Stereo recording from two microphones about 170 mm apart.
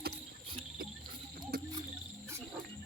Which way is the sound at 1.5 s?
60° right (ahead or behind).